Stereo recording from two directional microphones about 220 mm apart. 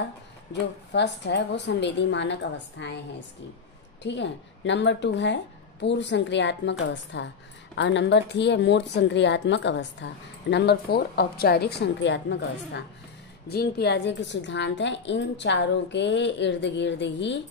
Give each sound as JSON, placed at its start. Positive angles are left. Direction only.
{"t": 0.5, "sound": "a woman's voice", "side_deg": 50}
{"t": 4.0, "sound": "a woman's voice", "side_deg": 55}